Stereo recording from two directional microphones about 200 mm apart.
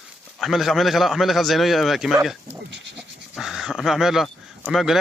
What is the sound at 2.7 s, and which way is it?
Goat, 60° right (ahead or behind).